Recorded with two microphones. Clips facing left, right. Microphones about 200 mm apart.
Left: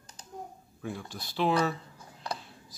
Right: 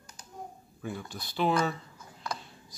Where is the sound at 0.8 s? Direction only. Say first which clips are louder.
Even; centre (ahead or behind).